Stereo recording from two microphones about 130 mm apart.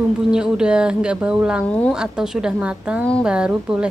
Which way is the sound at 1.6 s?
10° left (ahead or behind).